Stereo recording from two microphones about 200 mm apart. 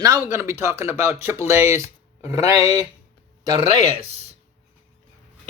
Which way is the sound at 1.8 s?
30° left (ahead or behind).